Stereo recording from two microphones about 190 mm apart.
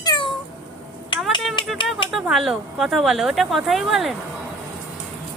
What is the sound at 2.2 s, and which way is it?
Speech, centre (ahead or behind).